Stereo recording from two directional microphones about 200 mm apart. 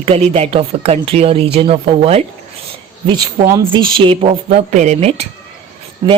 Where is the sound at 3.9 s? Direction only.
25° right (ahead or behind).